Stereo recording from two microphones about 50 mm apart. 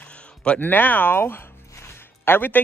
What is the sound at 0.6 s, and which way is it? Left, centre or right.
Speech, left.